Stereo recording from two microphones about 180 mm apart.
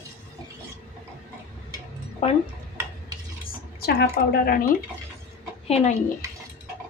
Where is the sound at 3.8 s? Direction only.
60° left (ahead or behind).